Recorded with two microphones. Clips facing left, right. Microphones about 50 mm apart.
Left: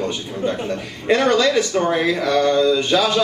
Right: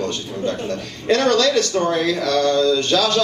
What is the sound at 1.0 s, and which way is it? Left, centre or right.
A man's voice, centre.